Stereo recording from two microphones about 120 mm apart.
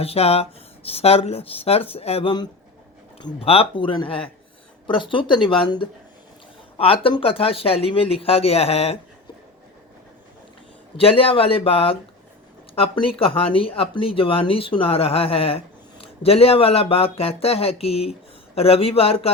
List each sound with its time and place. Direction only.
0.0 s speech: 55° left (ahead or behind)
3.4 s speech: 50° left (ahead or behind)
10.9 s speech: 50° left (ahead or behind)